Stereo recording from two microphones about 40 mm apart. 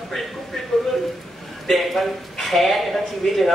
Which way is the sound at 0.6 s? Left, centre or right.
Centre.